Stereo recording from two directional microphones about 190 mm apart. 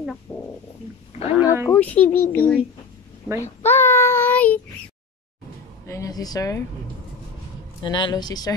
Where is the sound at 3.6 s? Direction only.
15° left (ahead or behind).